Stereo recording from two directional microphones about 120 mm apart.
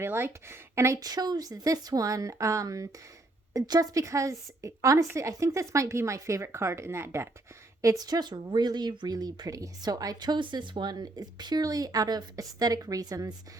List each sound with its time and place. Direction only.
0.0 s a woman's voice: 20° right (ahead or behind)